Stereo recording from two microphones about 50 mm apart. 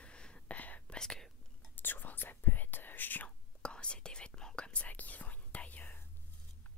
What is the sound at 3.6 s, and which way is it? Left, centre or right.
Whispering, centre.